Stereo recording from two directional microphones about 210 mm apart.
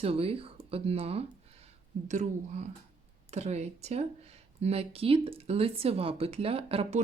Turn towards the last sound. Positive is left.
turn(degrees=-25)  # may be behind; listen again after turning